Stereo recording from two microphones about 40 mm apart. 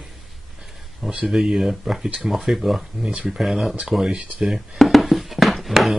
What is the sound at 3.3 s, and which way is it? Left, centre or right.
Speech, centre.